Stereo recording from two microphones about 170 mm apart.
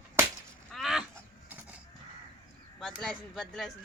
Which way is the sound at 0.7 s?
Centre (ahead or behind).